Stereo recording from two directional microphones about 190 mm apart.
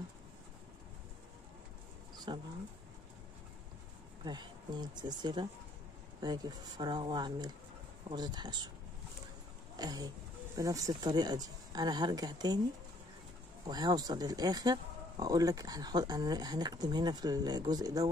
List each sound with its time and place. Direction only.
2.3 s speech: 25° right (ahead or behind)
4.2 s speech: 25° right (ahead or behind)
9.8 s speech: 20° right (ahead or behind)
13.7 s speech: 20° right (ahead or behind)